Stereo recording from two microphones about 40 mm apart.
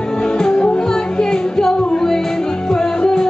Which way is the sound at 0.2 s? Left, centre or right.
Centre.